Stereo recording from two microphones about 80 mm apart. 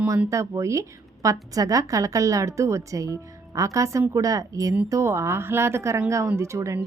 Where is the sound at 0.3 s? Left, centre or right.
Right.